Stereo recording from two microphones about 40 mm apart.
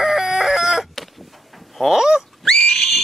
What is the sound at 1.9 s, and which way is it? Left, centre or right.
Speech, centre.